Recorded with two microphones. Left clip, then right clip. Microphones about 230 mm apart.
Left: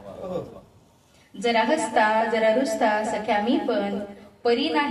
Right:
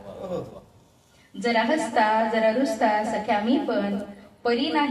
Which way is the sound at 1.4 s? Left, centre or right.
Left.